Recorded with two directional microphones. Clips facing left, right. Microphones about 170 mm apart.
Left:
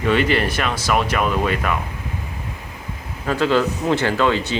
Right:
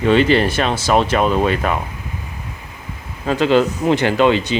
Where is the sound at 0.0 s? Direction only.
30° right (ahead or behind).